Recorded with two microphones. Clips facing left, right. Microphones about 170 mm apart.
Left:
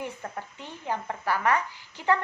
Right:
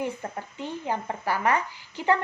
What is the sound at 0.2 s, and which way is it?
A woman's voice, 15° right (ahead or behind).